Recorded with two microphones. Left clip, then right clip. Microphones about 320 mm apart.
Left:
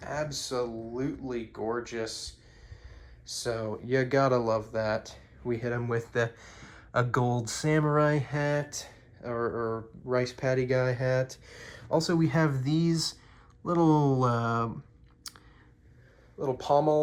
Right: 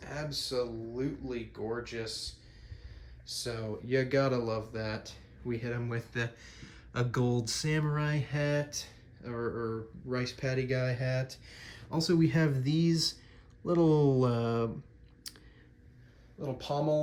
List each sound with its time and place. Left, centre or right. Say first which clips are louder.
0.0 s speech: left 4 dB; centre
15.3 s a sound: left 2 dB; centre
16.4 s speech: left 9 dB; centre